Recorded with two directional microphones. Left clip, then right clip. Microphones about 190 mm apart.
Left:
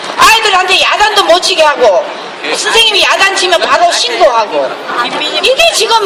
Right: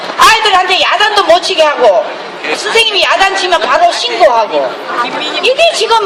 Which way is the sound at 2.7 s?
50° left (ahead or behind).